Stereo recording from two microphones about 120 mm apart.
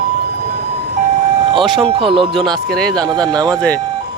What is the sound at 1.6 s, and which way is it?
Speech, centre (ahead or behind).